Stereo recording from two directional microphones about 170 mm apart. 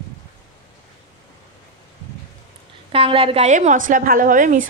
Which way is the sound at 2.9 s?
35° right (ahead or behind).